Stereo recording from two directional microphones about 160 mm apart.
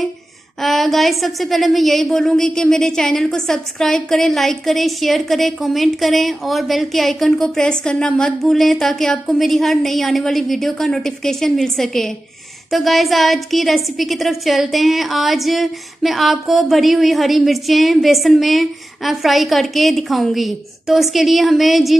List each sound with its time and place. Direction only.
0.6 s a woman's voice: centre (ahead or behind)